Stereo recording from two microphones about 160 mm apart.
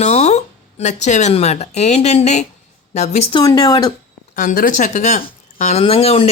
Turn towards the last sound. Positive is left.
turn(degrees=35)  # may be behind; listen again after turning